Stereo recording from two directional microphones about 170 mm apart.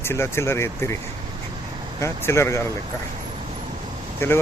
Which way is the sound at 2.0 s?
15° left (ahead or behind).